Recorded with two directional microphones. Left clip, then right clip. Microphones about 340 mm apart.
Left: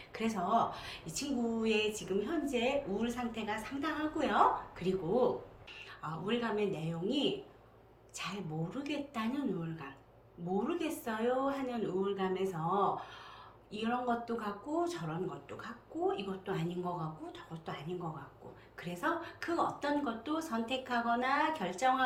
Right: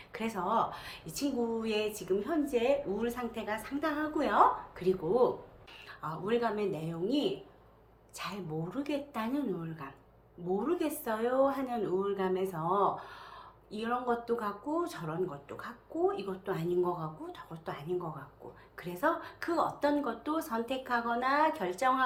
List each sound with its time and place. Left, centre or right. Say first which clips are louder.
0.1 s a woman's voice: even; centre